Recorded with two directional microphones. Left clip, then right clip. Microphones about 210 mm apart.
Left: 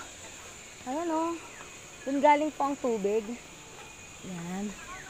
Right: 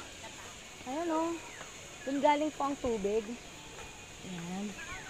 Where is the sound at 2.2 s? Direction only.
40° left (ahead or behind).